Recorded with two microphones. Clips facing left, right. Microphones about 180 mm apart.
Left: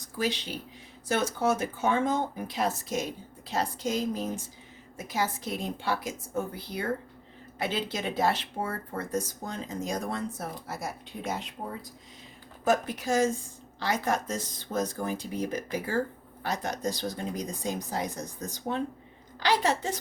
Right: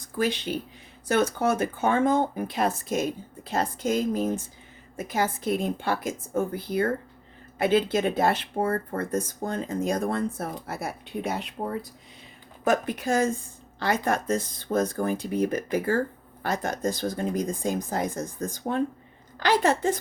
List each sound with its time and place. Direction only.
0.0 s speech: 55° right (ahead or behind)